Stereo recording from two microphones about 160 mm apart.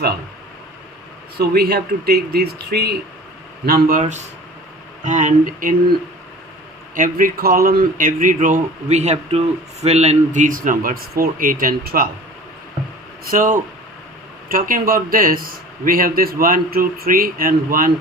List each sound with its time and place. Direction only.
1.4 s speech: 75° right (ahead or behind)
3.7 s a man's voice: 60° right (ahead or behind)
6.9 s a man's voice: 60° right (ahead or behind)
13.3 s a man's voice: 55° right (ahead or behind)